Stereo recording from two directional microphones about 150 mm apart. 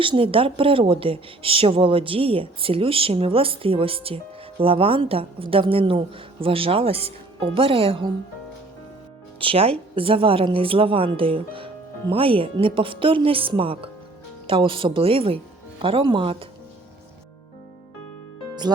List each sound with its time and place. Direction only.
0.0 s speech: 35° right (ahead or behind)
9.4 s speech: 40° right (ahead or behind)